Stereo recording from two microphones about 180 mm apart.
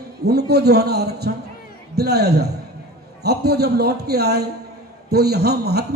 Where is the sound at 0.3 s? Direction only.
60° right (ahead or behind).